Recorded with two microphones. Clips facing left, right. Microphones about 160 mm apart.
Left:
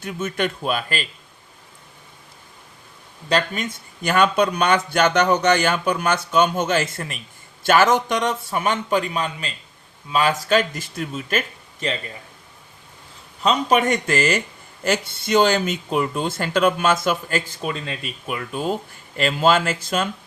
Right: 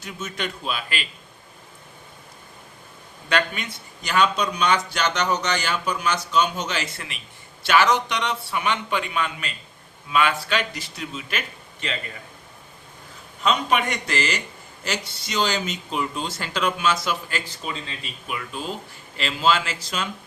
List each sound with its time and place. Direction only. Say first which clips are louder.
0.0 s speech: left 7 dB; 55° left (ahead or behind)
3.2 s speech: left 3 dB; 40° left (ahead or behind)
13.4 s speech: left 4 dB; 40° left (ahead or behind)